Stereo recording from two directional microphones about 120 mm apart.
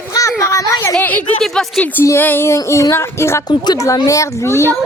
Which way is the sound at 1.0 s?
15° left (ahead or behind).